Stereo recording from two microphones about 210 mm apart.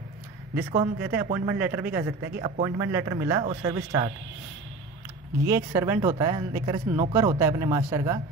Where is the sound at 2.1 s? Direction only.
60° right (ahead or behind).